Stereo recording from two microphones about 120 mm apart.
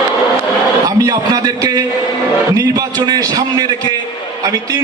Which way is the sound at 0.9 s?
30° right (ahead or behind).